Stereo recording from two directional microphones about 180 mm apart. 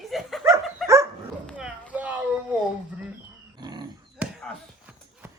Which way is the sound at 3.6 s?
25° right (ahead or behind).